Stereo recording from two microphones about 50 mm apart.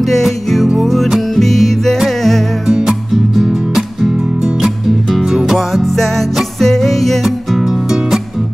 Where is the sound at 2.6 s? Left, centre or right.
Centre.